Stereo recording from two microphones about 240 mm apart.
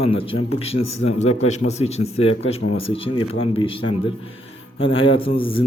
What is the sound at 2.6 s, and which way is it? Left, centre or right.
Speech, left.